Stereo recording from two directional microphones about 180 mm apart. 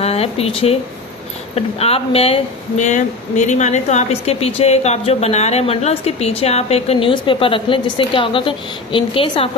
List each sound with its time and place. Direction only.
0.0 s speech: 35° left (ahead or behind)